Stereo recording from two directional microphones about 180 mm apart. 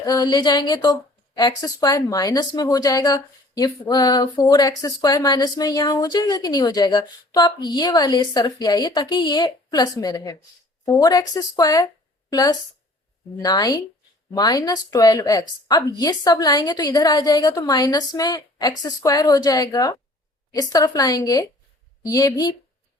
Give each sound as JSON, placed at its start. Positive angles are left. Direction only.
{"t": 0.0, "sound": "speech", "side_deg": 20}